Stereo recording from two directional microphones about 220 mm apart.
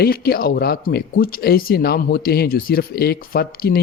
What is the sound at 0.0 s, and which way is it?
Speech, 45° left (ahead or behind).